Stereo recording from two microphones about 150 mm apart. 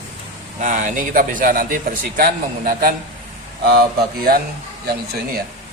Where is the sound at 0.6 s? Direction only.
55° right (ahead or behind); by 4.4 s 90° right.